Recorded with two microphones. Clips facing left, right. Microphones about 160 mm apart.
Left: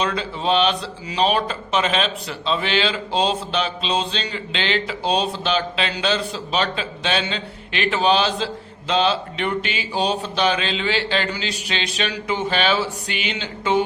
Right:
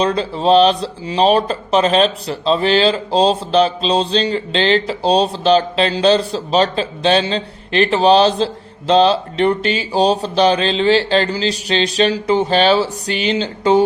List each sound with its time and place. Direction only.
0.0 s speech: 35° right (ahead or behind)